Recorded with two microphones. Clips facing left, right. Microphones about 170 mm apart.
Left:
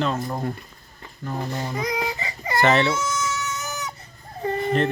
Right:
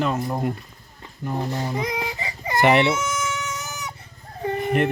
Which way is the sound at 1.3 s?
10° right (ahead or behind).